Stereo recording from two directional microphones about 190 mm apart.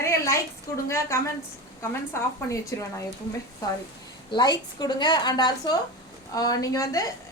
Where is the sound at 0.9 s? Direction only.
15° left (ahead or behind).